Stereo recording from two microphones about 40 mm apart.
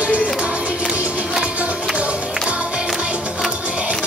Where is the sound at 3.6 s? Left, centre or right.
Right.